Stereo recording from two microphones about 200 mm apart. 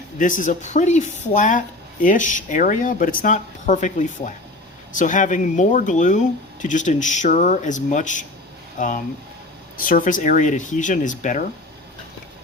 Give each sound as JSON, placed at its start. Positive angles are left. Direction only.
{"t": 0.2, "sound": "speech", "side_deg": 40}